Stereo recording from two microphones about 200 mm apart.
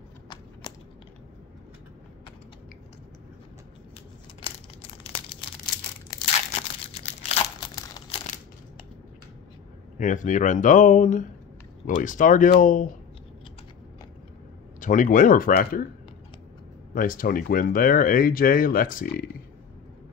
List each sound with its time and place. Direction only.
0.6 s a sound: 20° left (ahead or behind)
6.9 s crumpling: 30° left (ahead or behind)
7.7 s crumpling: 20° left (ahead or behind)
9.9 s speech: 40° left (ahead or behind)
14.8 s speech: 40° left (ahead or behind)
16.9 s speech: 45° left (ahead or behind)